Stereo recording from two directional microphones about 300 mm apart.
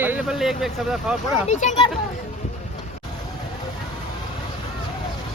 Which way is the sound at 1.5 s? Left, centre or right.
Left.